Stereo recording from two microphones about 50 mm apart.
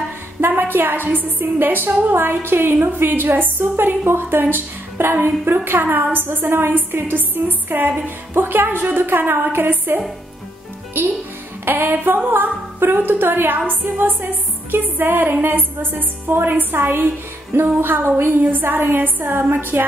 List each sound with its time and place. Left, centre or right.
0.4 s a woman's voice: right
11.6 s a woman's voice: right